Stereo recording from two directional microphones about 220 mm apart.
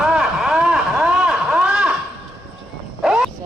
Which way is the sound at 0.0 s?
5° right (ahead or behind).